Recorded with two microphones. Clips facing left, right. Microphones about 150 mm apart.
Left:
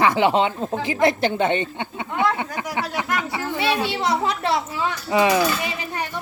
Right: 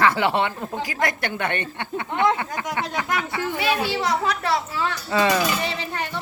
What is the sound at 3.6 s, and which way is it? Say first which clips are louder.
Speech: left 1 dB; 25° left (ahead or behind).